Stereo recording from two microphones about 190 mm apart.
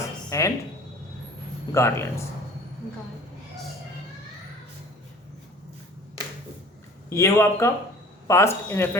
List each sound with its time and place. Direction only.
0.3 s a sound: 15° left (ahead or behind)
1.7 s speech: 15° left (ahead or behind)
7.1 s speech: 15° left (ahead or behind)